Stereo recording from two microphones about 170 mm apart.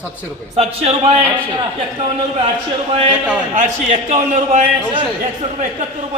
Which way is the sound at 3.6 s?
45° right (ahead or behind).